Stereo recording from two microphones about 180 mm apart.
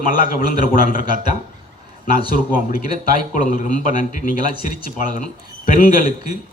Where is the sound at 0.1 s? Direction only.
50° left (ahead or behind).